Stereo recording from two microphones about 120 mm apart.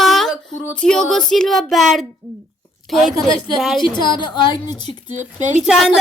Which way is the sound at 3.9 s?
40° left (ahead or behind).